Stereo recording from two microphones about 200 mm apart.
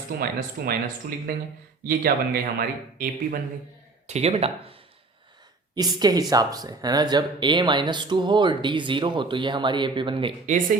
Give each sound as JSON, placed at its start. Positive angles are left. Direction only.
{"t": 0.2, "sound": "speech", "side_deg": -50}
{"t": 4.0, "sound": "speech", "side_deg": -30}
{"t": 5.7, "sound": "speech", "side_deg": -20}